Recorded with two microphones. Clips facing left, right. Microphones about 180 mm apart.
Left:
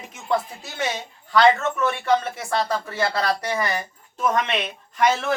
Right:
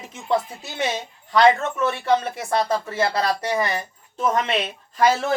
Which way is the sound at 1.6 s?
25° right (ahead or behind).